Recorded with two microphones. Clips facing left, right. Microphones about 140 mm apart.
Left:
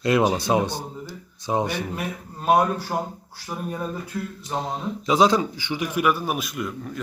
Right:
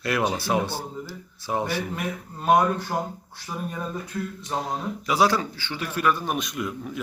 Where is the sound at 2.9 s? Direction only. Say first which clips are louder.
Left 1 dB; 20° left (ahead or behind).